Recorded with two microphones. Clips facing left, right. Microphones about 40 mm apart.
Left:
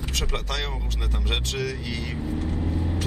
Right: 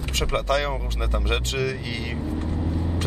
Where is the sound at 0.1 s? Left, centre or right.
Right.